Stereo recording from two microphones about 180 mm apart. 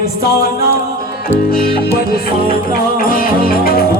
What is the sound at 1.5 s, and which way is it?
Music, 55° left (ahead or behind).